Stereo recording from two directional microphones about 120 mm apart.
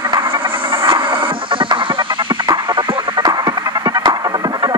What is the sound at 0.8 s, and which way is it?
Music, 45° right (ahead or behind).